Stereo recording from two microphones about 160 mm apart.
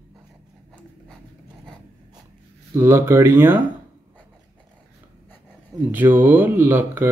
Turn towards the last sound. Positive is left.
turn(degrees=-15)  # may be behind; listen again after turning